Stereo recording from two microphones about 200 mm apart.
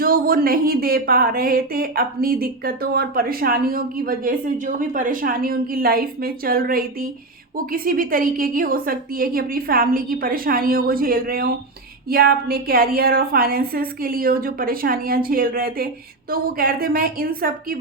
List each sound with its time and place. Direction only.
0.0 s speech: 45° right (ahead or behind)